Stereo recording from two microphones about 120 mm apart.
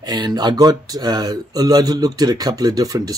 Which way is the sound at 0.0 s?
35° right (ahead or behind).